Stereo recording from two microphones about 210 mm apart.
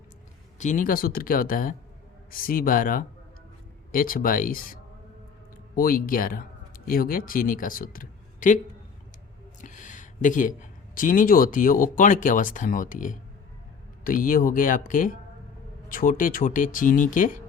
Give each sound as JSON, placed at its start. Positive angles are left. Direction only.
{"t": 0.6, "sound": "speech", "side_deg": 40}